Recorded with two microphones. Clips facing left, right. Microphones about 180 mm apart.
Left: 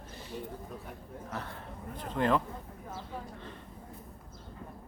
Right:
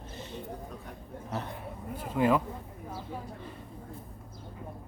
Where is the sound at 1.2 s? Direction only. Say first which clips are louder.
Right 4 dB; 20° right (ahead or behind).